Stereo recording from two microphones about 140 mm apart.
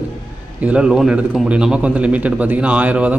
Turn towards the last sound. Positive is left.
turn(degrees=-10)  # may be behind; listen again after turning